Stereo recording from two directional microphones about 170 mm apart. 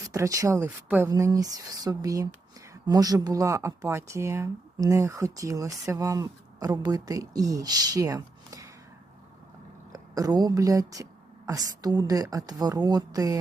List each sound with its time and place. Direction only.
0.1 s speech: 20° right (ahead or behind)
1.1 s speech: 20° right (ahead or behind)
9.9 s a woman's voice: 20° right (ahead or behind)